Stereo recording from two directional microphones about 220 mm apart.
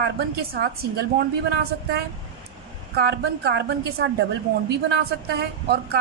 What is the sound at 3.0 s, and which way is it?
A woman's voice, 50° right (ahead or behind).